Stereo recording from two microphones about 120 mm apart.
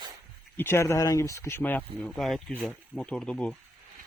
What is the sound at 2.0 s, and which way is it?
Speech, centre (ahead or behind).